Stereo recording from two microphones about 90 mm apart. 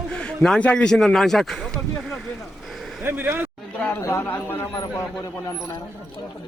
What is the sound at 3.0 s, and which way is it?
Speech, 25° right (ahead or behind).